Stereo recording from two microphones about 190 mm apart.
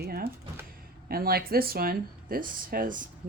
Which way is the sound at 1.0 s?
55° right (ahead or behind).